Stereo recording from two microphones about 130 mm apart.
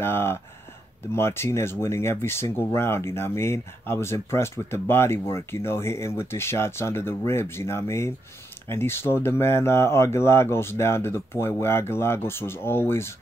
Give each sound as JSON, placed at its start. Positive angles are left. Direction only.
{"t": 0.0, "sound": "speech", "side_deg": 20}